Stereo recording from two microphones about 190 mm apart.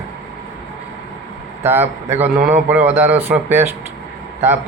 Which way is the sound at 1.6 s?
10° right (ahead or behind).